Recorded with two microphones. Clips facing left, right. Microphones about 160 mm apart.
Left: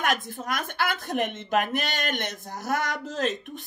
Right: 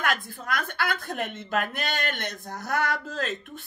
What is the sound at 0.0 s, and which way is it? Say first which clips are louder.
A woman's voice: left 2 dB; 20° left (ahead or behind).